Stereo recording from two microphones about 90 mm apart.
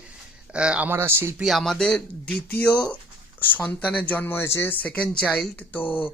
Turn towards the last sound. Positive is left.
turn(degrees=20)  # may be behind; listen again after turning